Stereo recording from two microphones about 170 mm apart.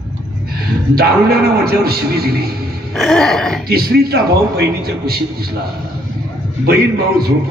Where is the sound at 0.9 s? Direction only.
65° right (ahead or behind).